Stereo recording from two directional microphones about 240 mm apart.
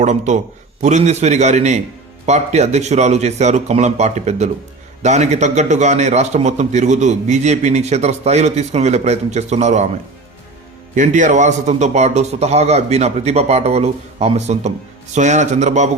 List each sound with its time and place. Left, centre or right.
0.0 s a man's voice: right
10.9 s a man's voice: right